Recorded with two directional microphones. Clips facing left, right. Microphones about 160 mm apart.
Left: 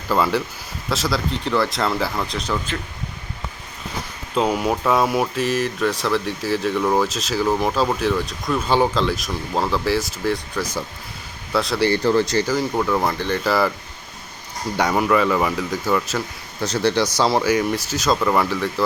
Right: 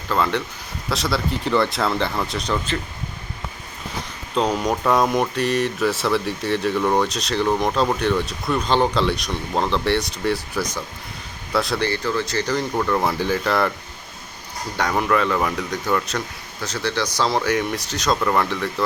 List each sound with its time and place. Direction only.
0.1 s speech: 5° left (ahead or behind)
4.4 s speech: 5° left (ahead or behind)
11.9 s speech: 35° left (ahead or behind)
12.5 s speech: 5° left (ahead or behind)
13.1 s speech: 10° right (ahead or behind)
13.4 s speech: 5° left (ahead or behind)
14.8 s speech: 5° left (ahead or behind)
16.6 s speech: 35° left (ahead or behind)
16.9 s speech: 20° left (ahead or behind)
17.2 s speech: 5° left (ahead or behind)